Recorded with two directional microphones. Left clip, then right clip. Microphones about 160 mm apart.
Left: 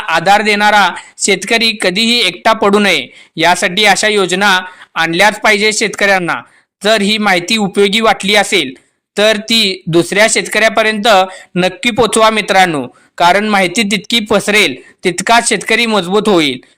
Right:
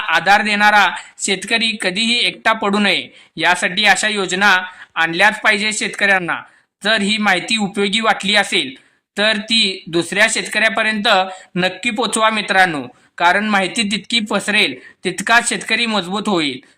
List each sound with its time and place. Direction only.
0.0 s a man's voice: 35° left (ahead or behind)